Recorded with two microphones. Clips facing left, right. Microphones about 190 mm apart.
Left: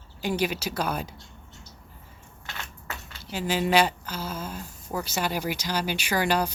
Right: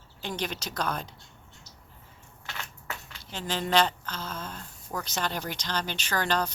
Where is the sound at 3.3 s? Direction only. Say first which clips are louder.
Left 3 dB; 10° left (ahead or behind).